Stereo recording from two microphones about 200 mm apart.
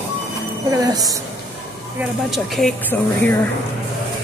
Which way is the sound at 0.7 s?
20° right (ahead or behind).